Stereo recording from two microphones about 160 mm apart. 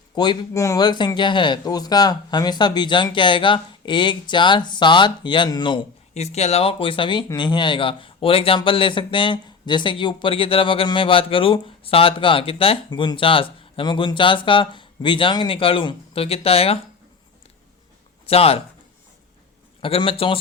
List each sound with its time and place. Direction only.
0.2 s speech: 25° left (ahead or behind)
6.1 s speech: 40° left (ahead or behind)
18.3 s speech: 40° left (ahead or behind)
19.8 s speech: 35° left (ahead or behind)